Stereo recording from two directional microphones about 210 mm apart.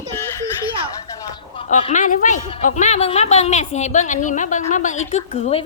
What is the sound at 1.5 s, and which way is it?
A woman's voice, 25° left (ahead or behind).